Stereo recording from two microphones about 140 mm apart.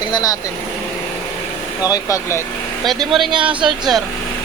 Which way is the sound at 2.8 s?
Centre (ahead or behind).